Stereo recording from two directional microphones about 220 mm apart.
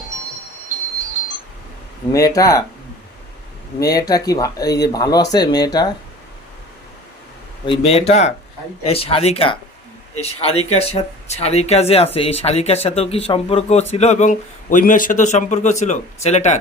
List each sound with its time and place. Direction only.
2.1 s speech: 15° left (ahead or behind)
3.8 s speech: 15° left (ahead or behind)
7.6 s a man's voice: 25° left (ahead or behind)